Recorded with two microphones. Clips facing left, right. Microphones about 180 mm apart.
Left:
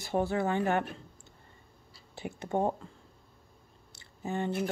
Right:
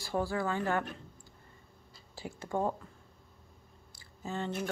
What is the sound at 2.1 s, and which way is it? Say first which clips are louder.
Speech: left 3 dB; 20° left (ahead or behind).